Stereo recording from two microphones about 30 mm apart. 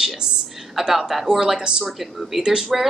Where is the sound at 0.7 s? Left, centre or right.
Centre.